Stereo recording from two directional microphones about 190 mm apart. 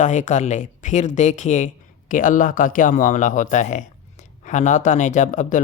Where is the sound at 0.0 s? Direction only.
40° left (ahead or behind).